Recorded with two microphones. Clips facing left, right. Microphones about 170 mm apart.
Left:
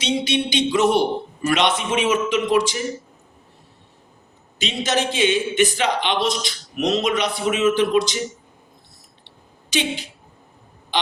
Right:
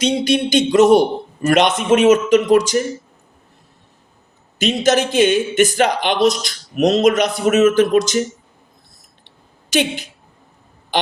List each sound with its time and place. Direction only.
0.0 s speech: 45° right (ahead or behind)
4.5 s speech: 45° right (ahead or behind)